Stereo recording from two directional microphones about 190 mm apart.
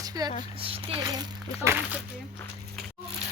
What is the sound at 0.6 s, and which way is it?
Speech, 30° right (ahead or behind).